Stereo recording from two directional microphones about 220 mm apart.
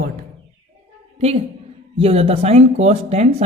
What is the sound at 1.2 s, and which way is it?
A woman's voice, 30° right (ahead or behind).